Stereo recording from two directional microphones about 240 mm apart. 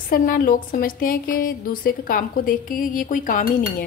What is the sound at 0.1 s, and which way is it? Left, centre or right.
Speech, left.